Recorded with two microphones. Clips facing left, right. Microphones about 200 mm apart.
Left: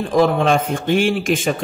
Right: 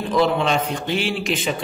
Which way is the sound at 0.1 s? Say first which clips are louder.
Left 4 dB; 50° left (ahead or behind).